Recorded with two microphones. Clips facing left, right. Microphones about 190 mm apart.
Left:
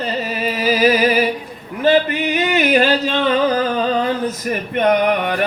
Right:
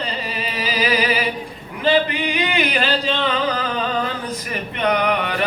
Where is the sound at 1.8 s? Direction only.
45° left (ahead or behind).